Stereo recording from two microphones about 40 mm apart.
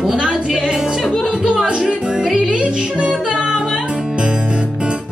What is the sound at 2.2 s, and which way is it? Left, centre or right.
Music, centre.